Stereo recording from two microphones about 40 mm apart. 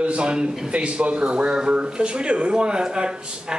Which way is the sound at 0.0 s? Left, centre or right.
Right.